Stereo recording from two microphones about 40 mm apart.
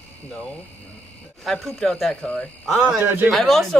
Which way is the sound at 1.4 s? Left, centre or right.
Centre.